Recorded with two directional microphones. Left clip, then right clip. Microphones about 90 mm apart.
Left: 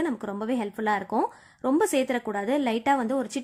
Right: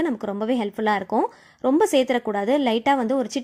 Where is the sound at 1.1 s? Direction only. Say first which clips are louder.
Right 4 dB; 20° right (ahead or behind).